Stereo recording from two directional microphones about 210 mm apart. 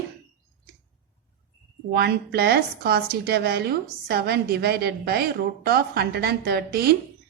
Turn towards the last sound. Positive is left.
turn(degrees=-50)  # may be behind; listen again after turning